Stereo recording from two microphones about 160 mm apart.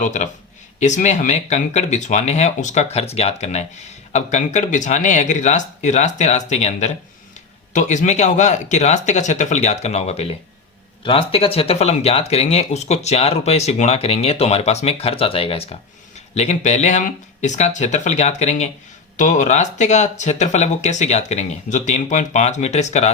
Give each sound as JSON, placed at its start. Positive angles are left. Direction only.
{"t": 0.0, "sound": "speech", "side_deg": 50}